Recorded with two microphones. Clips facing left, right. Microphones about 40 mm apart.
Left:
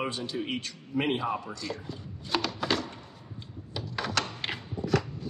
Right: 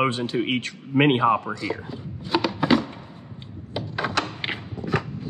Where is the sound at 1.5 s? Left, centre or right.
Right.